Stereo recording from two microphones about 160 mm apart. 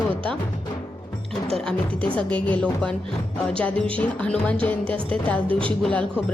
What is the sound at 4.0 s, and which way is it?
A woman's voice, 10° left (ahead or behind).